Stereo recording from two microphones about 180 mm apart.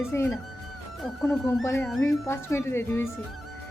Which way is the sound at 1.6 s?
15° left (ahead or behind).